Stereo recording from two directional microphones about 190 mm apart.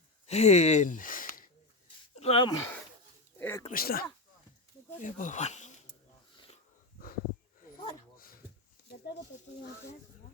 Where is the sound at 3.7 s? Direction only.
50° left (ahead or behind).